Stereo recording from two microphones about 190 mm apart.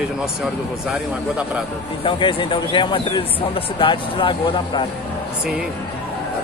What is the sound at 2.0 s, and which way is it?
Speech, 25° left (ahead or behind).